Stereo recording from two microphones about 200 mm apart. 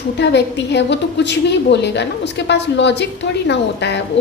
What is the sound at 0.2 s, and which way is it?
A woman's voice, 60° left (ahead or behind).